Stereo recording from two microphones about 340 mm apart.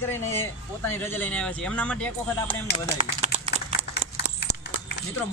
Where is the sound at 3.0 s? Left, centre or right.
Centre.